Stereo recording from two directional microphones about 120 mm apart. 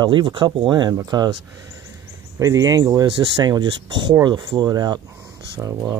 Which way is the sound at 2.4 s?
30° right (ahead or behind).